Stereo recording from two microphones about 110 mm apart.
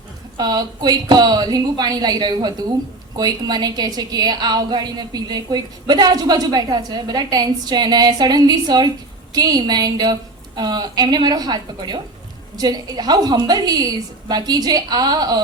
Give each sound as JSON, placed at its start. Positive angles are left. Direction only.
{"t": 0.3, "sound": "a woman's voice", "side_deg": -40}